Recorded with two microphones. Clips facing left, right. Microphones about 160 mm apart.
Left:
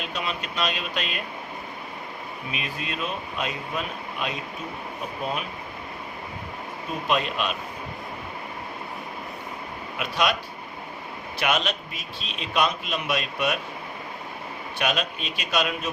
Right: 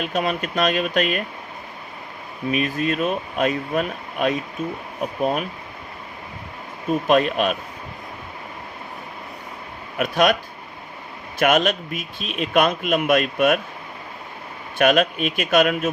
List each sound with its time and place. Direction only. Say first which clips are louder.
0.0 s a man's voice: right 8 dB; 50° right (ahead or behind)
2.5 s a man's voice: right 12 dB; 50° right (ahead or behind)
7.1 s a man's voice: right 7 dB; 50° right (ahead or behind)
10.0 s a man's voice: right 7 dB; 50° right (ahead or behind)
11.3 s a man's voice: right 8 dB; 50° right (ahead or behind)
14.8 s a man's voice: right 10 dB; 55° right (ahead or behind)